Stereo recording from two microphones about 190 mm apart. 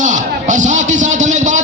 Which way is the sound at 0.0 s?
40° right (ahead or behind).